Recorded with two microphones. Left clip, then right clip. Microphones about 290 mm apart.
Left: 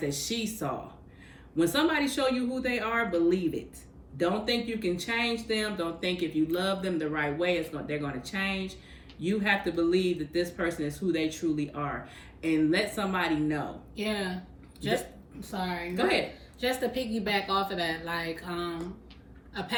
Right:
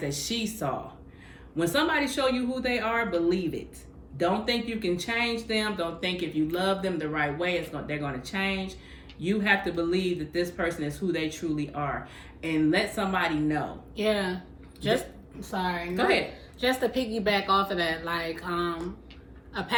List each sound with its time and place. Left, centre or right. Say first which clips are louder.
0.0 s a woman's voice: right 1 dB; centre